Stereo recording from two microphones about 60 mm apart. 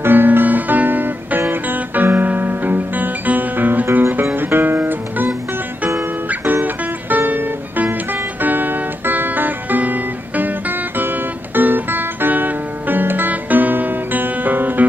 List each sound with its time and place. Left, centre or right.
0.0 s music: right